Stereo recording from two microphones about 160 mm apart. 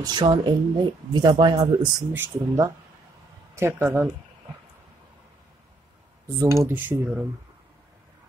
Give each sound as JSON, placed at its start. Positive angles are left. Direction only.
{"t": 0.0, "sound": "speech", "side_deg": -30}
{"t": 1.8, "sound": "speech", "side_deg": -10}
{"t": 6.4, "sound": "speech", "side_deg": -20}